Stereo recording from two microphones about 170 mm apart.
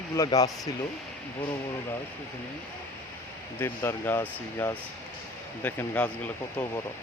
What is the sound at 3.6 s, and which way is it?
Speech, 15° left (ahead or behind).